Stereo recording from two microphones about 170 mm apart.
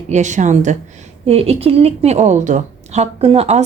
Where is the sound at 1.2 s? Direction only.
35° right (ahead or behind).